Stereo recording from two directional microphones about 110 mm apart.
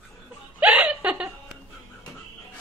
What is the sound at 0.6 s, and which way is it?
Chuckle, 10° right (ahead or behind).